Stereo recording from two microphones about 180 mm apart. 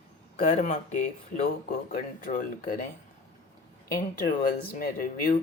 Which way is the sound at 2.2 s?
50° left (ahead or behind).